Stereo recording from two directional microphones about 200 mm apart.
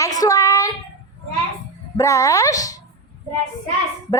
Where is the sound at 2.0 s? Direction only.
15° left (ahead or behind).